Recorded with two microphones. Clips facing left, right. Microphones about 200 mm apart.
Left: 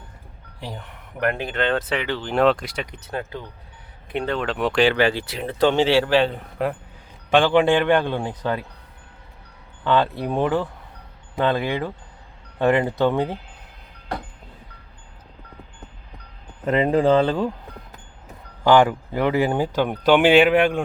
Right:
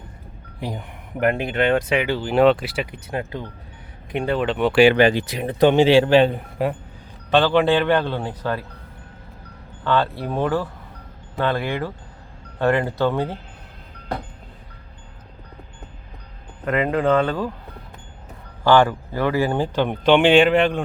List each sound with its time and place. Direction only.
0.7 s speech: 15° right (ahead or behind); by 4.8 s centre (ahead or behind)
4.8 s speech: 15° right (ahead or behind)
7.3 s a man's voice: 15° left (ahead or behind)
9.8 s a man's voice: 15° left (ahead or behind)
16.6 s speech: 25° left (ahead or behind)
18.6 s speech: 15° left (ahead or behind)
19.5 s a man's voice: 10° left (ahead or behind)